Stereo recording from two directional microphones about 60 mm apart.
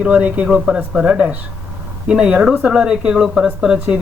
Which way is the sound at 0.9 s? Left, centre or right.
Centre.